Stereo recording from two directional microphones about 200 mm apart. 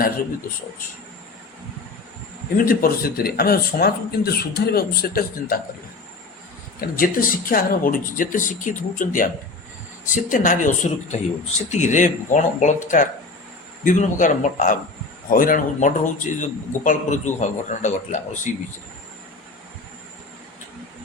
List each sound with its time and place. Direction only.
2.6 s speech: 50° left (ahead or behind)
6.9 s a man's voice: 45° left (ahead or behind)